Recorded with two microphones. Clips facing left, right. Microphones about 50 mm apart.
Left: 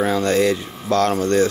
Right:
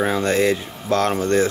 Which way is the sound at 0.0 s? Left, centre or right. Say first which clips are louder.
Left 1 dB; right.